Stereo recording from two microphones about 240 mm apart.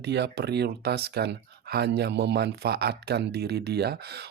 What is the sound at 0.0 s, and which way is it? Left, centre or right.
Speech, right.